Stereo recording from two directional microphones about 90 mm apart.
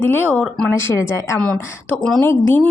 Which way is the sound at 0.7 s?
25° left (ahead or behind).